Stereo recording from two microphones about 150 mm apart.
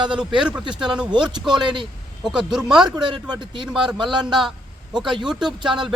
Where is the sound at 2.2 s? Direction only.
5° right (ahead or behind).